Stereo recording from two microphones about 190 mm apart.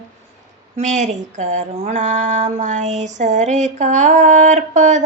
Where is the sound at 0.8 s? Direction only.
40° right (ahead or behind).